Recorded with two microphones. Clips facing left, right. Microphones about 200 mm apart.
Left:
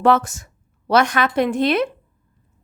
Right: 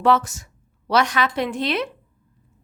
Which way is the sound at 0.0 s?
50° left (ahead or behind).